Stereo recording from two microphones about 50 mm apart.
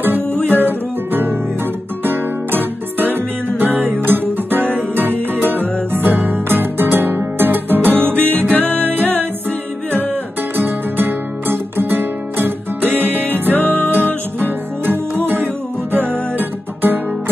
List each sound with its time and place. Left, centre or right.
0.3 s music: left
0.6 s guitar: right
2.0 s music: right
8.6 s music: left
10.5 s music: right
13.5 s music: left
16.1 s music: right